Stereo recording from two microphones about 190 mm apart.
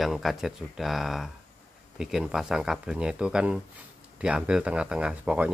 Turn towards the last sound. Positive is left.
turn(degrees=-5)  # may be behind; listen again after turning